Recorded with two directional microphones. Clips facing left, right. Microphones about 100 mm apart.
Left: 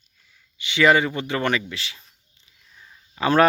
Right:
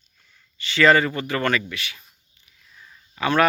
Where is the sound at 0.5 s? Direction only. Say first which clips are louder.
Right 1 dB; 15° left (ahead or behind).